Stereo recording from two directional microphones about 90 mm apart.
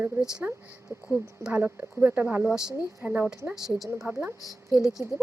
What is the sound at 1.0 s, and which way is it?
Speech, 15° right (ahead or behind).